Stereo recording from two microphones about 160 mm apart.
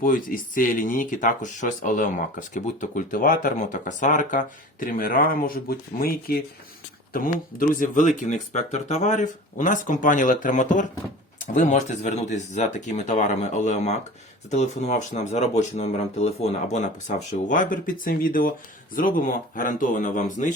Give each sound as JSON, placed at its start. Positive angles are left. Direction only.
{"t": 0.0, "sound": "speech", "side_deg": 60}
{"t": 7.7, "sound": "speech", "side_deg": 55}